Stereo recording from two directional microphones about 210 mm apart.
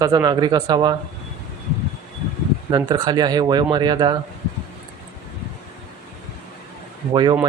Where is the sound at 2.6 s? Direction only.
20° right (ahead or behind).